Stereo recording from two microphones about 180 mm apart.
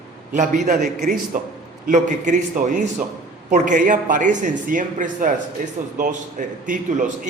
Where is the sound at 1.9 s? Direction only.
45° right (ahead or behind).